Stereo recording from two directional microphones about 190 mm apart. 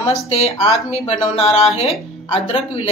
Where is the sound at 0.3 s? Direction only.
30° left (ahead or behind).